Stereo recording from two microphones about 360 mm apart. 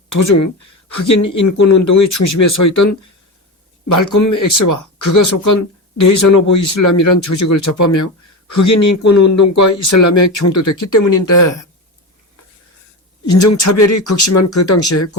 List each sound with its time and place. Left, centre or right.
0.1 s speech: left
3.8 s speech: left
13.2 s speech: left